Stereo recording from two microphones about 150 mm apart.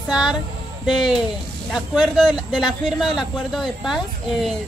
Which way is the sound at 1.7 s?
Centre (ahead or behind).